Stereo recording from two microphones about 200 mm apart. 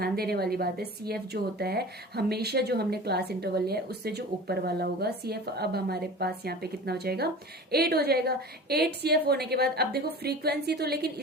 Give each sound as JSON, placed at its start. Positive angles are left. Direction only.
{"t": 0.0, "sound": "a woman's voice", "side_deg": -50}